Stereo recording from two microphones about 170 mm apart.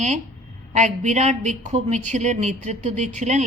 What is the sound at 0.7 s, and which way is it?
A woman's voice, 45° right (ahead or behind).